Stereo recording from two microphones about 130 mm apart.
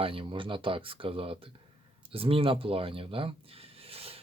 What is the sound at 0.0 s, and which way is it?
Speech, 45° right (ahead or behind).